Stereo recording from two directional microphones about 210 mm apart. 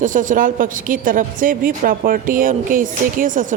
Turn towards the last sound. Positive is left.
turn(degrees=-40)  # may be behind; listen again after turning